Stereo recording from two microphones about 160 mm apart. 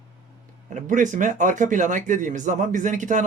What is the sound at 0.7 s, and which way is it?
Speech, 50° right (ahead or behind).